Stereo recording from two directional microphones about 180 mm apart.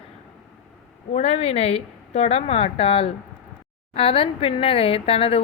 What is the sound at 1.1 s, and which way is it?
A woman's voice, 35° left (ahead or behind).